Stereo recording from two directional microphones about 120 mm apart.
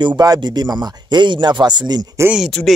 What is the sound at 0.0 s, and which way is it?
Speech, 35° right (ahead or behind).